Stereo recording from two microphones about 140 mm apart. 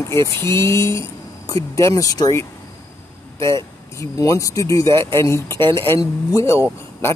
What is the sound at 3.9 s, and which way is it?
Speech, 25° left (ahead or behind).